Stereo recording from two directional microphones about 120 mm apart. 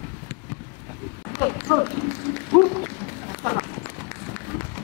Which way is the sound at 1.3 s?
20° left (ahead or behind).